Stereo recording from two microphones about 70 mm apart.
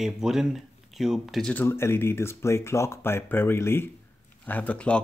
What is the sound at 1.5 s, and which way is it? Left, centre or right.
Speech, left.